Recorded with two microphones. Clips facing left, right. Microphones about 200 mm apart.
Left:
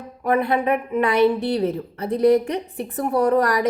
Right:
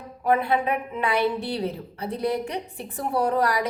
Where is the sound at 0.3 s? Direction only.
60° left (ahead or behind).